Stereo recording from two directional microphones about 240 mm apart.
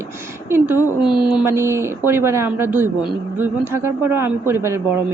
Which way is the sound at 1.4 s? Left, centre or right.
Centre.